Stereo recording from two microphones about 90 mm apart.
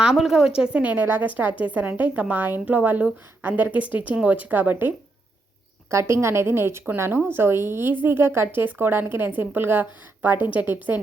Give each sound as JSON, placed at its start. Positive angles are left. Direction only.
{"t": 0.0, "sound": "a woman's voice", "side_deg": -5}
{"t": 5.9, "sound": "a woman's voice", "side_deg": -30}